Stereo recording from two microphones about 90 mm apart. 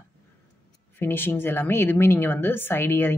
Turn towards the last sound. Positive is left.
turn(degrees=25)  # may be behind; listen again after turning